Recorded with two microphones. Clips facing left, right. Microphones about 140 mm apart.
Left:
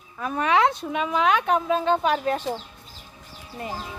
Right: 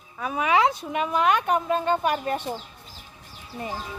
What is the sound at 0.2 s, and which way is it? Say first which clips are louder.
Speech: left 1 dB; 5° right (ahead or behind).